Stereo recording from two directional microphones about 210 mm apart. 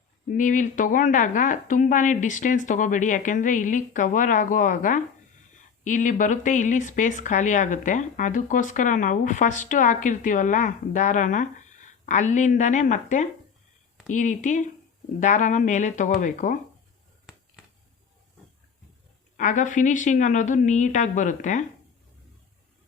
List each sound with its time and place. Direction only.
0.3 s speech: 35° left (ahead or behind)
19.4 s speech: 35° left (ahead or behind)